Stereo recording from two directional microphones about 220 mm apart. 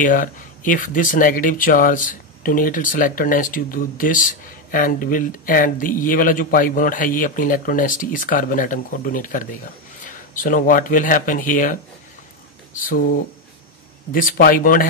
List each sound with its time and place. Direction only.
0.0 s speech: 35° left (ahead or behind)